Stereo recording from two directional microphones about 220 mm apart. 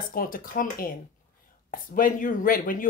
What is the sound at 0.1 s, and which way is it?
Speech, 40° left (ahead or behind).